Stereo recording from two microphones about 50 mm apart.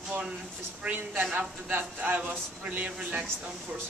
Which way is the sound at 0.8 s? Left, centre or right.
Right.